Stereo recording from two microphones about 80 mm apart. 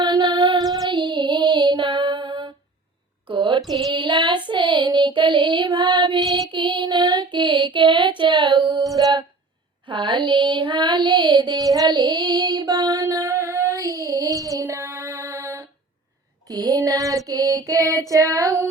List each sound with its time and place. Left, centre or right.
0.0 s music: right
0.9 s child singing: right
3.2 s a sound: right
3.6 s music: centre
3.9 s child singing: right
6.2 s music: centre
6.5 s child singing: right
9.8 s child singing: right
11.6 s child singing: right
11.9 s child singing: right
16.5 s child singing: right